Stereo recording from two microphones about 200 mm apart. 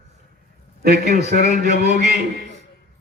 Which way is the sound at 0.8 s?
50° right (ahead or behind).